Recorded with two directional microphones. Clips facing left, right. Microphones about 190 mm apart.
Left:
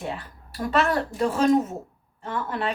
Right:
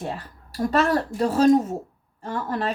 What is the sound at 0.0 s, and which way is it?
A woman's voice, 40° right (ahead or behind).